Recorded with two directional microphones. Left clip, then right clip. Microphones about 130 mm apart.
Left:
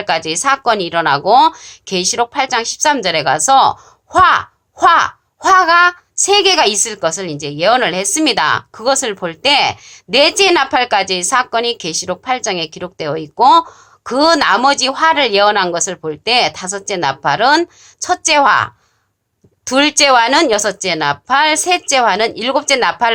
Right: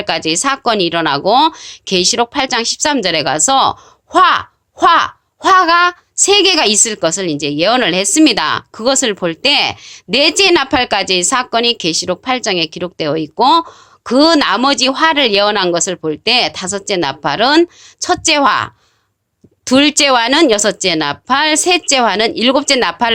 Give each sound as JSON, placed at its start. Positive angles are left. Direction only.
{"t": 0.0, "sound": "speech", "side_deg": -35}